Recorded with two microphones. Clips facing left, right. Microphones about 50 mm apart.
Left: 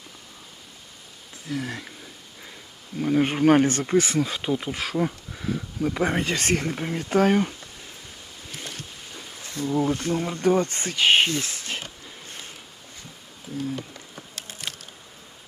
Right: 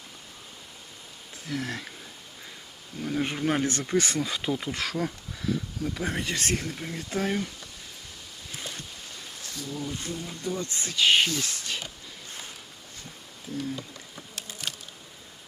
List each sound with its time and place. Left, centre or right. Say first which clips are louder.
1.5 s speech: left 2 dB; centre
3.0 s speech: left 8 dB; left
5.9 s speech: left 6 dB; left
8.5 s a sound: left 1 dB; centre
9.6 s speech: left 11 dB; left
9.9 s speech: left 10 dB; left
10.6 s speech: left 3 dB; left